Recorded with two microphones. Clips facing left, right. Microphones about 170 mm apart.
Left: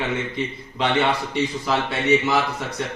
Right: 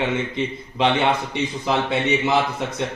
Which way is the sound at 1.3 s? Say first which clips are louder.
Even; 20° right (ahead or behind).